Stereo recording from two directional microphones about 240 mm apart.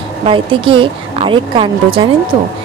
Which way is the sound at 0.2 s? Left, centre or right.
Right.